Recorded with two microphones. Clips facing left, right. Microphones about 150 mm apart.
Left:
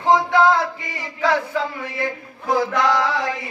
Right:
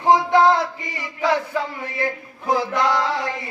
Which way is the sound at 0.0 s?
20° right (ahead or behind).